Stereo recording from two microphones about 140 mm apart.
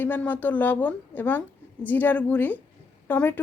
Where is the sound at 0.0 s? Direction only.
10° left (ahead or behind).